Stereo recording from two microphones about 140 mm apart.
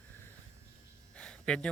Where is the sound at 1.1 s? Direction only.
5° left (ahead or behind).